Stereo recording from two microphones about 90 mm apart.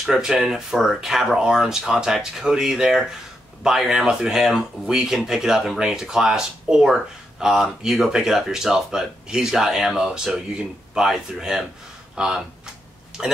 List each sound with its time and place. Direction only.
0.0 s speech: 5° right (ahead or behind)